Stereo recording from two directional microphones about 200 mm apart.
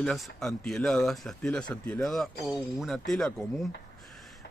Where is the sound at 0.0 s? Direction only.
Centre (ahead or behind).